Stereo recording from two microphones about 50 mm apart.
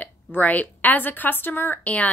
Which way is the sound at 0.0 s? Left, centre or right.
Left.